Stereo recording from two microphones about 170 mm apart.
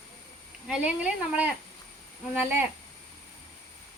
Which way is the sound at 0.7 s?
5° right (ahead or behind).